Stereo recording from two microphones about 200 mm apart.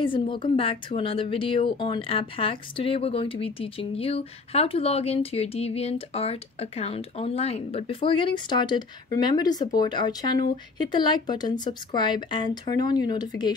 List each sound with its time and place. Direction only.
0.0 s speech: 25° left (ahead or behind)